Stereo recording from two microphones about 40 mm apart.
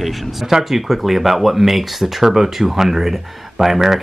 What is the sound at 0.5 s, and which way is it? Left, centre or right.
Speech, centre.